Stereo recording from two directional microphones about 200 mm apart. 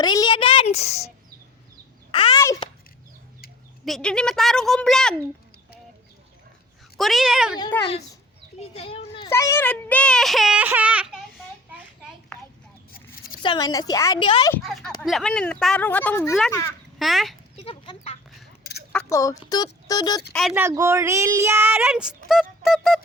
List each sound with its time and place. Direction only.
0.0 s a woman's voice: 20° left (ahead or behind)
2.1 s a sound: 25° left (ahead or behind)
3.8 s speech: centre (ahead or behind)
6.9 s speech: centre (ahead or behind)
7.7 s speech: 10° left (ahead or behind)
8.6 s a child's voice: 30° left (ahead or behind)
9.3 s speech: 15° left (ahead or behind); by 11.2 s 5° right (ahead or behind)
13.4 s a woman's voice: 20° left (ahead or behind)
14.5 s speech: centre (ahead or behind)
17.0 s speech: centre (ahead or behind)
17.6 s a sound: 30° left (ahead or behind)
18.9 s a sound: 10° left (ahead or behind)
19.5 s a woman's voice: 20° left (ahead or behind)
20.5 s speech: 10° right (ahead or behind)